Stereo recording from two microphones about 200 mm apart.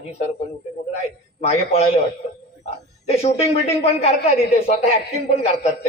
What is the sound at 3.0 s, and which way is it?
A man's voice, 30° left (ahead or behind).